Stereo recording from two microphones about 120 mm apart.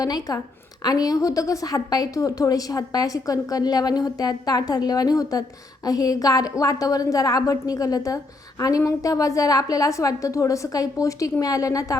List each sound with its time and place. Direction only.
0.0 s a woman's voice: 30° left (ahead or behind)